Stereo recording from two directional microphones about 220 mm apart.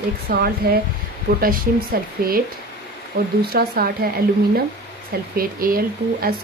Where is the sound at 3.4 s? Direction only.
45° right (ahead or behind).